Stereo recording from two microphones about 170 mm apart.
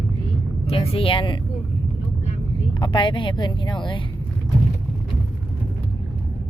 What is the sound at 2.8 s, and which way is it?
Speech, 30° left (ahead or behind).